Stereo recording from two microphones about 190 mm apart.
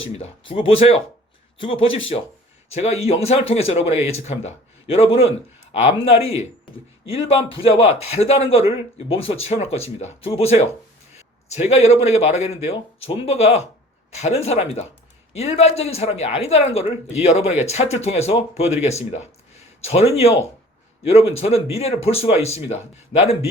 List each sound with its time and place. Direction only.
0.0 s speech: 30° left (ahead or behind)